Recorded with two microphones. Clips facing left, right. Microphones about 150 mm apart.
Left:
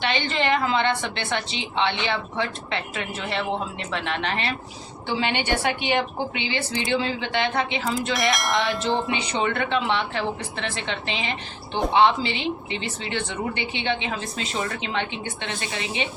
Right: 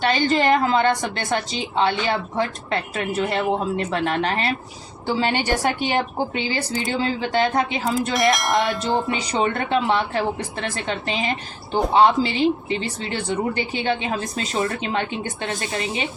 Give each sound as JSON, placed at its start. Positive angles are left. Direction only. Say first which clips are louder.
{"t": 0.0, "sound": "a woman's voice", "louder": "right 5 dB", "side_deg": -40}
{"t": 8.1, "sound": "speech", "louder": "right 4 dB", "side_deg": 0}
{"t": 9.0, "sound": "a woman's voice", "louder": "right 3 dB", "side_deg": -35}